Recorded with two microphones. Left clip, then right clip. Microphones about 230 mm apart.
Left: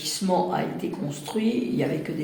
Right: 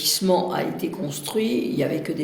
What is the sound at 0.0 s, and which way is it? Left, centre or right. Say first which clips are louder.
Speech: right 4 dB; right.